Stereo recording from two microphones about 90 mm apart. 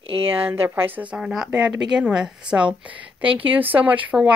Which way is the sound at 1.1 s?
5° right (ahead or behind).